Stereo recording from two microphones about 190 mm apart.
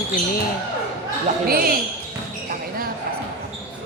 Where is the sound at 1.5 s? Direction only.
50° right (ahead or behind).